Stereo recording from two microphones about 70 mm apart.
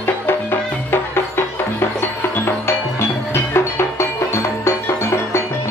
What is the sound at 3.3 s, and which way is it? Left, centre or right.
Music, left.